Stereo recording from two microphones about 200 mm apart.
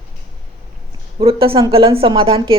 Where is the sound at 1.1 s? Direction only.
25° right (ahead or behind).